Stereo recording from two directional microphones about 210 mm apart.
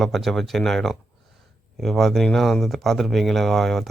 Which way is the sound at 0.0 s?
Centre (ahead or behind).